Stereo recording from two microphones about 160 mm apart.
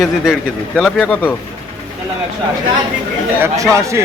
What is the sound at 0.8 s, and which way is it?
Speech, 5° left (ahead or behind).